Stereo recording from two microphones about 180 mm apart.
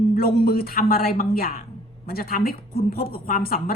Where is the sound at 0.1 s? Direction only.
55° left (ahead or behind).